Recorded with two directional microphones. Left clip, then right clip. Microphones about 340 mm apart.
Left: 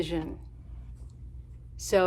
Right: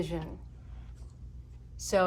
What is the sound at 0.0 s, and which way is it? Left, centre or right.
Speech, left.